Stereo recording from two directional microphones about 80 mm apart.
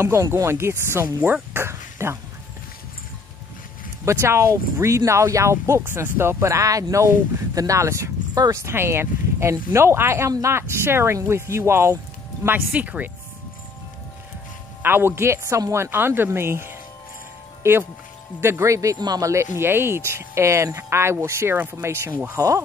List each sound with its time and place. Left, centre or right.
0.0 s speech: right
4.0 s speech: right
12.4 s speech: right
14.8 s speech: right
18.9 s speech: right
19.2 s speech: right
22.3 s speech: right